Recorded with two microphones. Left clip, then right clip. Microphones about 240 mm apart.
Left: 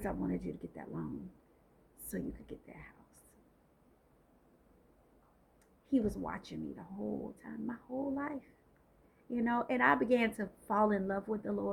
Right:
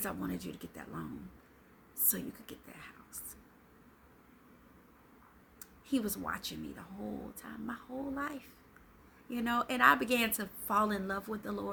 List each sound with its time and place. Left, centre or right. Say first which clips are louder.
0.0 s a woman's voice: left 1 dB; right
2.0 s a woman's voice: right 1 dB; right
5.9 s a woman's voice: left 1 dB; centre